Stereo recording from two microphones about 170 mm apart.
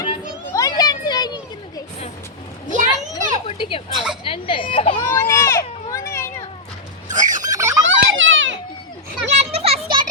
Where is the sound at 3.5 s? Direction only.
30° left (ahead or behind).